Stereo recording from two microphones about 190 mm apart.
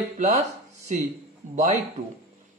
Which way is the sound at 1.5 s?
40° right (ahead or behind).